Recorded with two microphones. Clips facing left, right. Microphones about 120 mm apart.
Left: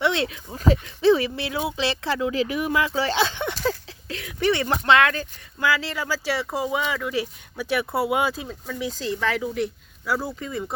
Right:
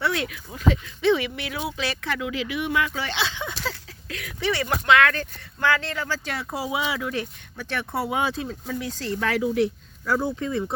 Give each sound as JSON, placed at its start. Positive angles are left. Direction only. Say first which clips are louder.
{"t": 0.0, "sound": "speech", "louder": "left 3 dB", "side_deg": 25}
{"t": 4.1, "sound": "a sound", "louder": "left 2 dB", "side_deg": 25}
{"t": 4.5, "sound": "speech", "louder": "even", "side_deg": 25}
{"t": 7.1, "sound": "speech", "louder": "left 3 dB", "side_deg": 10}